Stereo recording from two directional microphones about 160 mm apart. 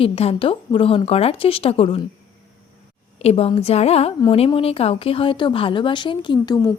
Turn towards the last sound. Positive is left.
turn(degrees=20)  # may be behind; listen again after turning